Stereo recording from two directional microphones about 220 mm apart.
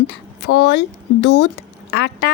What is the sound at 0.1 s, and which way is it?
A woman's voice, 50° left (ahead or behind).